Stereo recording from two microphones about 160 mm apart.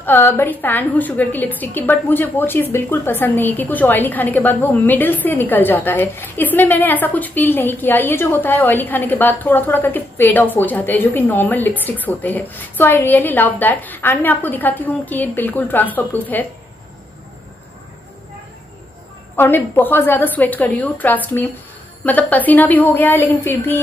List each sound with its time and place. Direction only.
0.0 s a woman's voice: 15° left (ahead or behind)
19.3 s a woman's voice: 15° left (ahead or behind)